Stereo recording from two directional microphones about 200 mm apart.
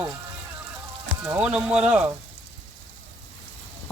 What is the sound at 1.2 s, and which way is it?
Speech, 5° right (ahead or behind).